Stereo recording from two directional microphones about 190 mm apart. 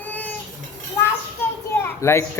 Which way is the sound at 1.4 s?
15° left (ahead or behind).